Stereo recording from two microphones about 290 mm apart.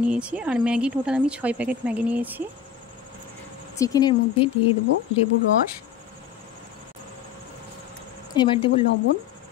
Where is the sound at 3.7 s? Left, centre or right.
Centre.